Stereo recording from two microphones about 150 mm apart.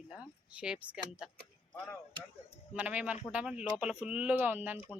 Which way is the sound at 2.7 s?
10° right (ahead or behind).